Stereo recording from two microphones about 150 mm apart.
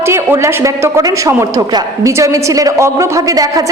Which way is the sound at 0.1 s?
20° right (ahead or behind).